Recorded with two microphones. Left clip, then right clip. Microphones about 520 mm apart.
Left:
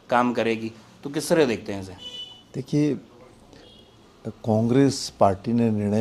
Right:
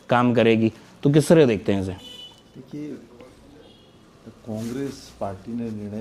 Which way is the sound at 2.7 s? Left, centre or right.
Left.